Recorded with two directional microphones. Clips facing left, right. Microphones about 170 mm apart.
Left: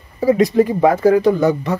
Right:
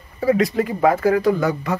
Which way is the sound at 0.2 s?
25° left (ahead or behind).